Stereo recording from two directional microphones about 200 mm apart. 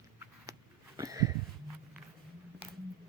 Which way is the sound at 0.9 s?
20° right (ahead or behind).